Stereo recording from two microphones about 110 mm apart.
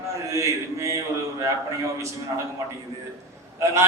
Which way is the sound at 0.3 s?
30° right (ahead or behind).